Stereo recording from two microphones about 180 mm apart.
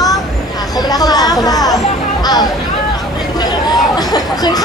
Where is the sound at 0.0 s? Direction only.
20° left (ahead or behind).